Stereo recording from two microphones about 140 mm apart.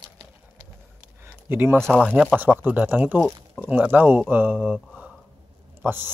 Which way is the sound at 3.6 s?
10° right (ahead or behind).